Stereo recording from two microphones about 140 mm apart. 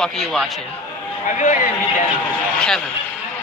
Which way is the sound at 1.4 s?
60° left (ahead or behind).